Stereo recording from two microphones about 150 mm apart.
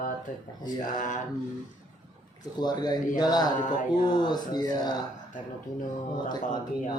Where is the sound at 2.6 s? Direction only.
30° left (ahead or behind).